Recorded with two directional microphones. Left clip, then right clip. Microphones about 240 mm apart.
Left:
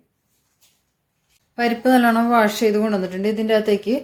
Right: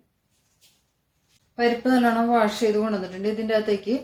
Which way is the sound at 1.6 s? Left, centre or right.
Left.